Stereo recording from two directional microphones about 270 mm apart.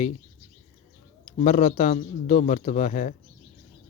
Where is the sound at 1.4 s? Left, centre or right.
Left.